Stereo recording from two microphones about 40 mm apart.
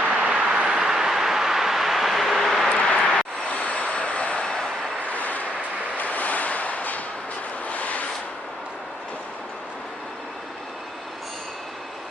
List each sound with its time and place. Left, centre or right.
0.0 s vehicle: right; by 2.6 s centre
3.0 s vehicle: centre
3.5 s vehicle: left
6.0 s a sound: left